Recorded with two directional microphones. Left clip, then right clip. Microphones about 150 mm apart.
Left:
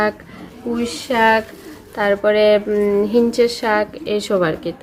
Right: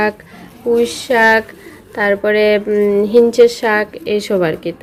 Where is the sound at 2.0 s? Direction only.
15° right (ahead or behind).